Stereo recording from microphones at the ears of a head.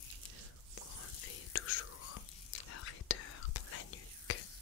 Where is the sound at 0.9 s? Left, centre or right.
Left.